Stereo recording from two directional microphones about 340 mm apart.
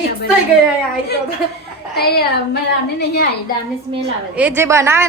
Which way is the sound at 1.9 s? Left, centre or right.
Left.